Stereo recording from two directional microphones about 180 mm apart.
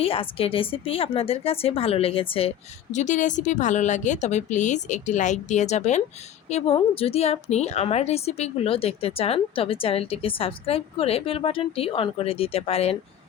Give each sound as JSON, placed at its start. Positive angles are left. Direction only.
{"t": 0.0, "sound": "a woman's voice", "side_deg": 30}
{"t": 2.9, "sound": "a woman's voice", "side_deg": 40}